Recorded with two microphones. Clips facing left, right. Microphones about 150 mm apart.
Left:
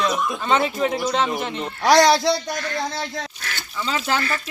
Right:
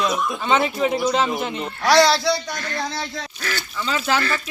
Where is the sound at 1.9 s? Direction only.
15° left (ahead or behind).